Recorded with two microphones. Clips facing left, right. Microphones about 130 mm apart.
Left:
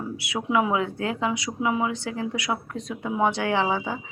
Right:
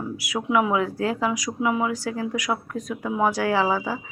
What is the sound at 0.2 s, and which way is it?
A woman's voice, 30° left (ahead or behind).